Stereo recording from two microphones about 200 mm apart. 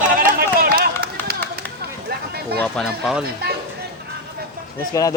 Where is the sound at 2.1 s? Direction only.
50° right (ahead or behind).